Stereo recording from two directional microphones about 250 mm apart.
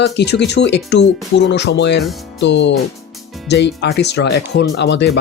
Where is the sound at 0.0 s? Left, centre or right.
Left.